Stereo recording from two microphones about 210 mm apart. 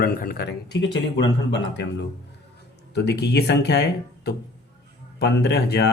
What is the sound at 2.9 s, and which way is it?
Speech, 50° left (ahead or behind).